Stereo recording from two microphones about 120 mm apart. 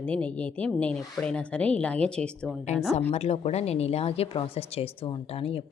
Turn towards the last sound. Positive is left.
turn(degrees=55)  # may be behind; listen again after turning